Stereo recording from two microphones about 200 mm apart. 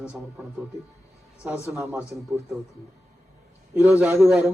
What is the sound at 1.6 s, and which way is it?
Speech, 10° right (ahead or behind).